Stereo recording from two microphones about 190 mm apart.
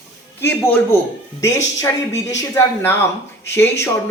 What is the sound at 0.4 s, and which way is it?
Speech, 10° left (ahead or behind).